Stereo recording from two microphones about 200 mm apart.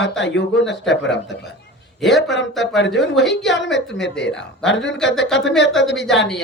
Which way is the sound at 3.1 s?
Centre (ahead or behind).